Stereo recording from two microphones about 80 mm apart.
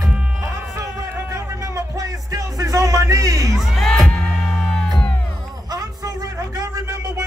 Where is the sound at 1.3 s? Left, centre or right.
Right.